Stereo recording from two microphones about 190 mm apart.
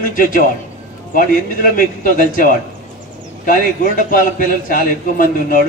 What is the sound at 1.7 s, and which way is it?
A man's voice, 45° left (ahead or behind).